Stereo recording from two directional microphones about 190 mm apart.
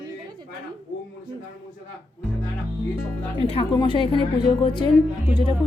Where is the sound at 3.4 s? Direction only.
30° left (ahead or behind).